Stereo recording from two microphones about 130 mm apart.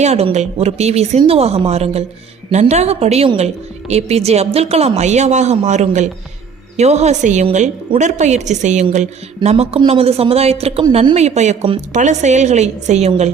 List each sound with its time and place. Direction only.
0.0 s a woman's voice: 55° right (ahead or behind)